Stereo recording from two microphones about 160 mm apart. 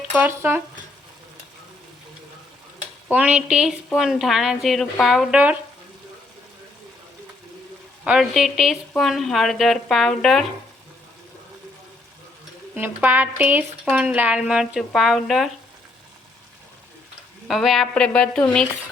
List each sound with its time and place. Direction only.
0.2 s speech: 15° right (ahead or behind)
3.1 s speech: 10° right (ahead or behind)
8.0 s speech: 5° right (ahead or behind)
12.7 s speech: 10° right (ahead or behind)
17.5 s speech: centre (ahead or behind)